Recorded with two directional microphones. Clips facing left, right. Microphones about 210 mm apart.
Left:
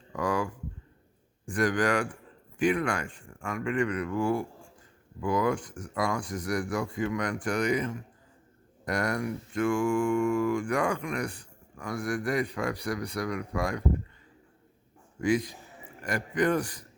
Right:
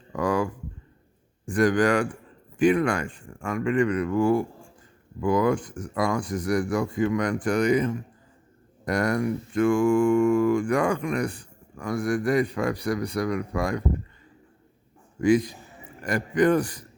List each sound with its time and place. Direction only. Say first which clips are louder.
0.2 s speech: right 5 dB; 30° right (ahead or behind)
1.5 s speech: right 5 dB; 30° right (ahead or behind)
5.2 s speech: right 5 dB; 35° right (ahead or behind)
8.9 s speech: right 5 dB; 35° right (ahead or behind)
16.0 s speech: right 6 dB; 35° right (ahead or behind)